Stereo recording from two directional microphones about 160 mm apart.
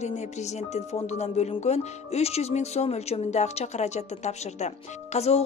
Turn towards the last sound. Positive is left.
turn(degrees=40)  # may be behind; listen again after turning